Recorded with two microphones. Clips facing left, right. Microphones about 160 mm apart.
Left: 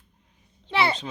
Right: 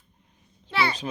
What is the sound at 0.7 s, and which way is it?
Speech, 25° left (ahead or behind).